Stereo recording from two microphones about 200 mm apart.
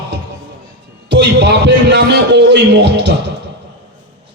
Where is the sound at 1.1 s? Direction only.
60° right (ahead or behind).